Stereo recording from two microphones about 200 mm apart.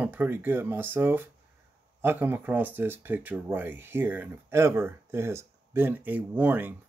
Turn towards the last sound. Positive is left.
turn(degrees=-10)  # may be behind; listen again after turning